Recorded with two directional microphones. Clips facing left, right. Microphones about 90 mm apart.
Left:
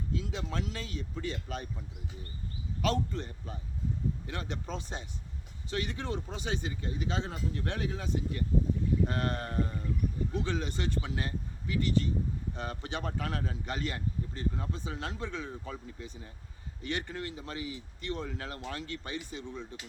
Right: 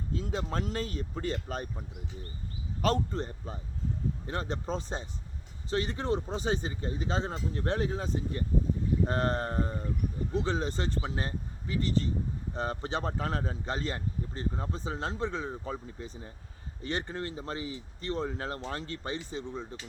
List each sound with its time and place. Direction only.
0.1 s speech: 40° right (ahead or behind)
2.8 s speech: 40° right (ahead or behind)